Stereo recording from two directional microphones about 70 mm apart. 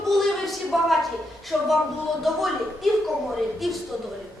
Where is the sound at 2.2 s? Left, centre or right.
Centre.